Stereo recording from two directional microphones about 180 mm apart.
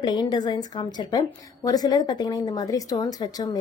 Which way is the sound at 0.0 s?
25° left (ahead or behind).